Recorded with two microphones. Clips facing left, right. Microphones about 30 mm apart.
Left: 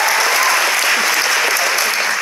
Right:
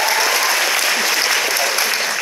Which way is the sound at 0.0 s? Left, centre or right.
Centre.